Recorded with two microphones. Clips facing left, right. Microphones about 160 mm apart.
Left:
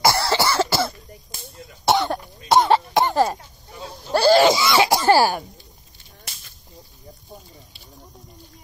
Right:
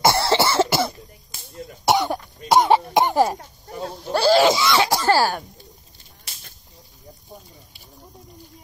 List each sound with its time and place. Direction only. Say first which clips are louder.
0.0 s cough: right 1 dB; 25° right (ahead or behind)
3.3 s a sound: right 6 dB; 50° right (ahead or behind)
3.9 s throat clearing: left 2 dB; centre (ahead or behind)